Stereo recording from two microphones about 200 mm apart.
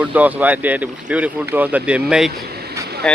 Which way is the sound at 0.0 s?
10° right (ahead or behind).